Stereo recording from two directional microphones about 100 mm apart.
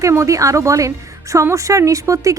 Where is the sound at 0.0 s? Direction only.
30° right (ahead or behind).